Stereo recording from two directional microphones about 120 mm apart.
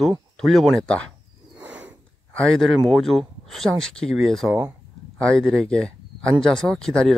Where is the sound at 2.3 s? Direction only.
5° left (ahead or behind).